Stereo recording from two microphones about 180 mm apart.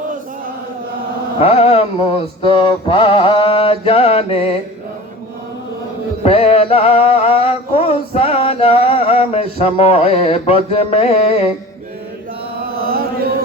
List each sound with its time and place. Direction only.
1.4 s mantra: 35° left (ahead or behind)
6.2 s mantra: 35° left (ahead or behind)